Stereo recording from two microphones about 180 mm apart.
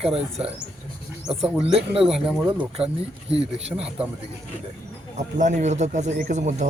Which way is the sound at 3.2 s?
35° right (ahead or behind).